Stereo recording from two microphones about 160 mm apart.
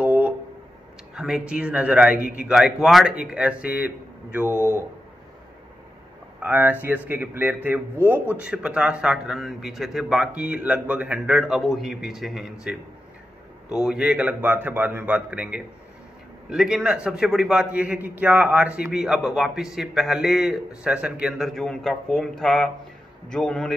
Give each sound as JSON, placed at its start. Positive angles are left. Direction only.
{"t": 0.0, "sound": "a sound", "side_deg": -10}
{"t": 1.1, "sound": "a man's voice", "side_deg": -5}
{"t": 4.5, "sound": "speech", "side_deg": 15}
{"t": 6.4, "sound": "a man's voice", "side_deg": -10}